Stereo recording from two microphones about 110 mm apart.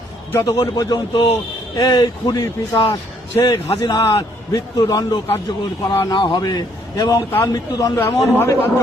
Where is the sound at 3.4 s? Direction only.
50° left (ahead or behind).